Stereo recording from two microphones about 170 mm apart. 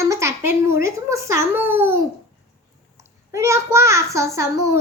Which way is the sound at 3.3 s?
15° right (ahead or behind).